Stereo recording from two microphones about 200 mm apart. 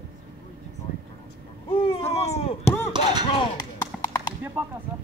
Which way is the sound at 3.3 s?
25° left (ahead or behind).